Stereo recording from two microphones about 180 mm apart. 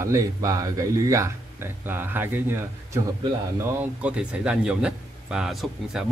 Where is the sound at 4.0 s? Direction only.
5° right (ahead or behind).